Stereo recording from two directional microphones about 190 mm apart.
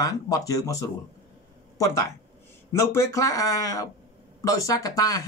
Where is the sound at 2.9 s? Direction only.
15° left (ahead or behind).